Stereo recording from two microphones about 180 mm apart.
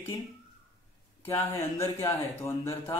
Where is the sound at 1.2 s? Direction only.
15° left (ahead or behind).